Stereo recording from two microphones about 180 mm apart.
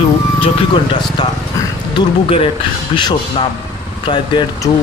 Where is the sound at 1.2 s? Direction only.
25° left (ahead or behind).